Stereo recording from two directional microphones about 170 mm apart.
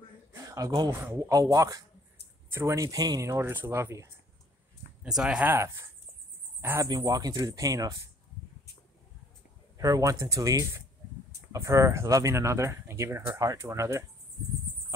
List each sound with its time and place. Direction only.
0.5 s speech: 20° right (ahead or behind)
5.0 s speech: 5° right (ahead or behind); by 8.0 s 20° right (ahead or behind)
9.8 s speech: 20° right (ahead or behind)